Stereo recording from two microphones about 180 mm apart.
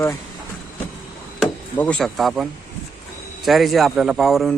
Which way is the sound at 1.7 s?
5° left (ahead or behind).